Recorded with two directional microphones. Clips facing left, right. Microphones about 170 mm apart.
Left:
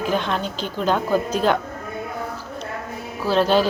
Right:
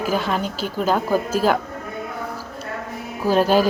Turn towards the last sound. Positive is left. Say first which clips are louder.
# right 1 dB
turn(degrees=-10)  # may be behind; listen again after turning